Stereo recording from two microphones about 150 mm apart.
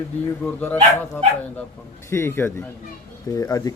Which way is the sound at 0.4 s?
10° left (ahead or behind).